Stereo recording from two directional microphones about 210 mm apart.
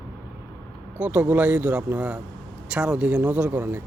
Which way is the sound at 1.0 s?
5° right (ahead or behind).